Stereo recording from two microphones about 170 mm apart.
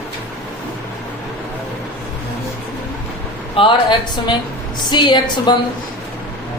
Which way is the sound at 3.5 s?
25° left (ahead or behind).